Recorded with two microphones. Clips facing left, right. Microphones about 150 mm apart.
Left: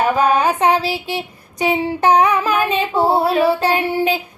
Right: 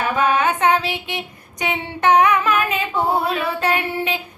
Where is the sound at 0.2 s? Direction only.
35° left (ahead or behind).